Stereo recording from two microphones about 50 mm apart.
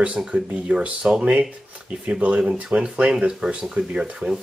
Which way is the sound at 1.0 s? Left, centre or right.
Right.